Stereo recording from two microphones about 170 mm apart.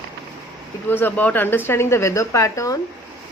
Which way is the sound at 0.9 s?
10° left (ahead or behind).